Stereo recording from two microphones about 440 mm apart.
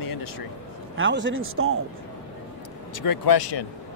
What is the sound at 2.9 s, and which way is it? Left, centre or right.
Speech, left.